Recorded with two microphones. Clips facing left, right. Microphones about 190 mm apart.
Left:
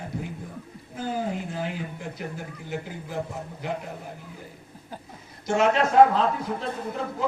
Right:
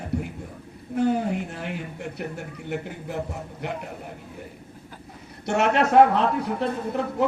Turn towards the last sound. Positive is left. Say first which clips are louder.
# right 5 dB
turn(degrees=-70)  # may be behind; listen again after turning